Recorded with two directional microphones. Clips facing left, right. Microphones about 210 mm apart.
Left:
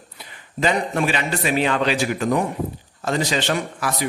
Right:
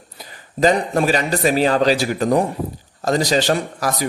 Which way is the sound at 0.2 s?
40° right (ahead or behind).